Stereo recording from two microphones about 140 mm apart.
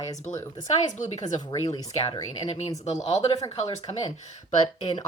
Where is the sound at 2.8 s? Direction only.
50° left (ahead or behind).